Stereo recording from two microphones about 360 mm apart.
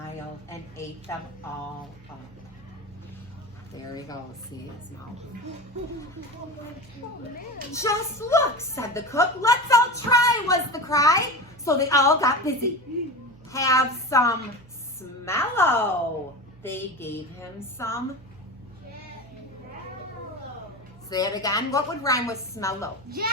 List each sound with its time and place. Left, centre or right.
3.8 s a woman's voice: centre
7.7 s a woman's voice: centre
21.1 s a woman's voice: centre
23.0 s a child's voice: right